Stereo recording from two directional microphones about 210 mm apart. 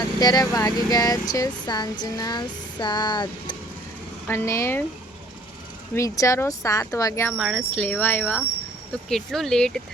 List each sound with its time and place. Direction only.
0.2 s speech: 20° left (ahead or behind)
5.9 s speech: 15° left (ahead or behind)
7.3 s speech: centre (ahead or behind)